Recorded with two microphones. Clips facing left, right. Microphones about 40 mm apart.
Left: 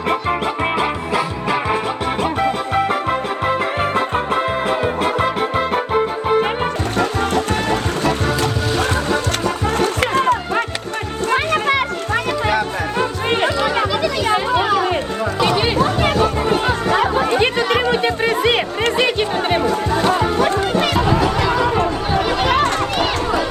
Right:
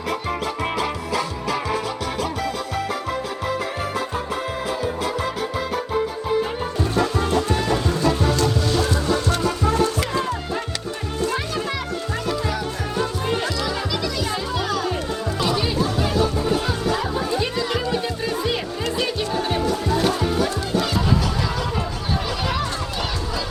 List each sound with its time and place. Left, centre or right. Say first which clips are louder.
0.1 s music: left 6 dB; left
9.6 s music: left 4 dB; left
15.4 s chatter: left 6 dB; left
20.1 s music: left 6 dB; left
21.3 s a sound: left 8 dB; left
21.8 s music: left 8 dB; left